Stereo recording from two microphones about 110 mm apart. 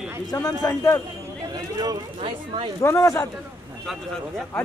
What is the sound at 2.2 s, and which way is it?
Speech, 55° right (ahead or behind).